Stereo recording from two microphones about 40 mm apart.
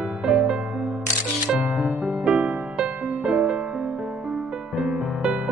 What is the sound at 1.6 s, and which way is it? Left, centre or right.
Music, right.